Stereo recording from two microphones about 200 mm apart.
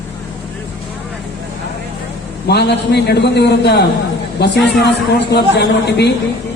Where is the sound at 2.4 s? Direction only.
55° left (ahead or behind).